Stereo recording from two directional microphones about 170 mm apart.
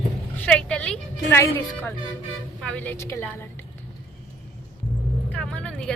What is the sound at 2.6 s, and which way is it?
Speech, 5° left (ahead or behind).